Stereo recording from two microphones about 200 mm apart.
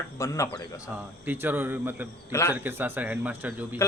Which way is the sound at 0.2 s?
15° left (ahead or behind).